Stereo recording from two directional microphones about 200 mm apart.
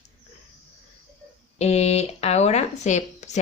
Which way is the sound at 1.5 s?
30° left (ahead or behind).